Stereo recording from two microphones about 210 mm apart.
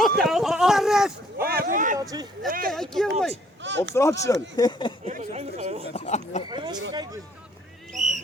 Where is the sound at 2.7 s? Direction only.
Centre (ahead or behind).